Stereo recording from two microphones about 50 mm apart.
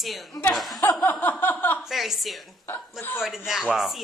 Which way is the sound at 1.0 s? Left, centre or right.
Left.